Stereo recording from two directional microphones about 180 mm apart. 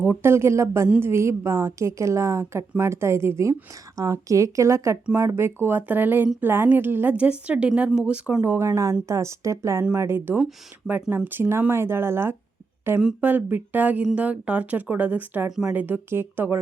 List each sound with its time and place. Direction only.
0.0 s speech: 15° right (ahead or behind)